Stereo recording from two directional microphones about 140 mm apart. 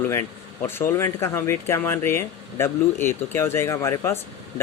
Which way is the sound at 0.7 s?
15° left (ahead or behind).